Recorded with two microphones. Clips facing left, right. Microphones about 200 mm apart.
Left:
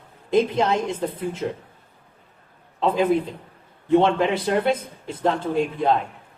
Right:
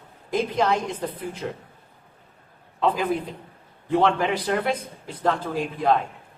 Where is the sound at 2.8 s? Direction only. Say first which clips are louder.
Left 4 dB; 25° left (ahead or behind).